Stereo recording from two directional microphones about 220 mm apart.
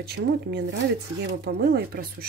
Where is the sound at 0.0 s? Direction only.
50° right (ahead or behind).